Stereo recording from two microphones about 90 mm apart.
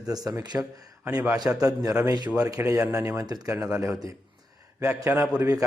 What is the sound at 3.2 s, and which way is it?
Speech, 45° right (ahead or behind).